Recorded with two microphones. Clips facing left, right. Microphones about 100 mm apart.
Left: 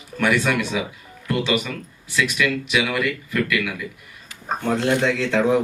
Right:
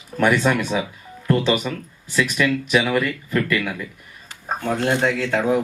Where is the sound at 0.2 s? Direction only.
45° right (ahead or behind).